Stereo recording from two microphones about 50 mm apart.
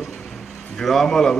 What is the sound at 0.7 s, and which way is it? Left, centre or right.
Speech, centre.